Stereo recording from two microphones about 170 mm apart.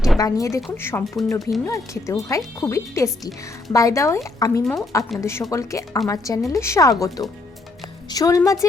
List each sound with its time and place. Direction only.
0.2 s speech: 20° left (ahead or behind)